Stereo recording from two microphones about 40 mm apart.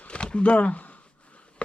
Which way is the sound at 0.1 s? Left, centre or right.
Left.